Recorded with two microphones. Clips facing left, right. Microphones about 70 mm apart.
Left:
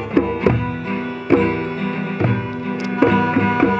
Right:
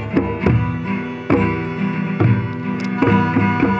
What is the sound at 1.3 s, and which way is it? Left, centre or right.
Music, centre.